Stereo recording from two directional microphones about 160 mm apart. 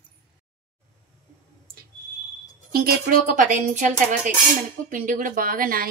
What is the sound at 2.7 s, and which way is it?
Speech, 65° right (ahead or behind).